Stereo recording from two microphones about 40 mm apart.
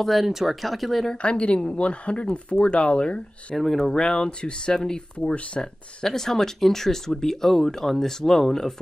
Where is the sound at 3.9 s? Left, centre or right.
Left.